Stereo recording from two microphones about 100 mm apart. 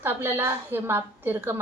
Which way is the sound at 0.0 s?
20° right (ahead or behind).